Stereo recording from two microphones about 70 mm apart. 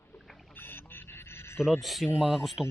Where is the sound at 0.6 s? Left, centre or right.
Left.